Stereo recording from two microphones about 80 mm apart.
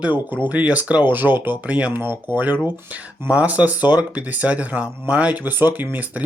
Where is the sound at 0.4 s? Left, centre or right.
Centre.